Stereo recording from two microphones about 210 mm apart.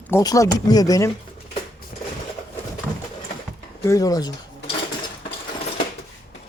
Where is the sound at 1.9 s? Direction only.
45° left (ahead or behind).